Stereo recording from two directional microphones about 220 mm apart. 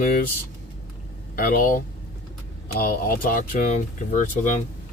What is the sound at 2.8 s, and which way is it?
Speech, 40° left (ahead or behind).